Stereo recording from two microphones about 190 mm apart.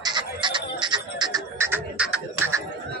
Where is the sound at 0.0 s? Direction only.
25° right (ahead or behind); by 2.6 s 10° right (ahead or behind).